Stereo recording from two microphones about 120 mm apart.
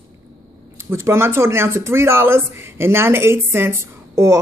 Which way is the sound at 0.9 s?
20° right (ahead or behind).